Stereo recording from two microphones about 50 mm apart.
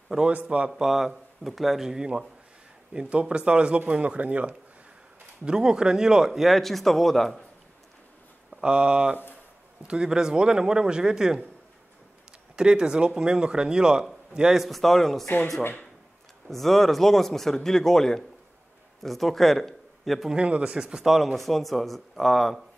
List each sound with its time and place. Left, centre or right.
0.3 s speech: right
0.7 s speech: centre; by 4.6 s right
5.4 s a man's voice: centre
8.5 s speech: centre
12.5 s a man's voice: centre
14.6 s a man's voice: centre
16.4 s a man's voice: centre
20.3 s speech: right
20.9 s a man's voice: centre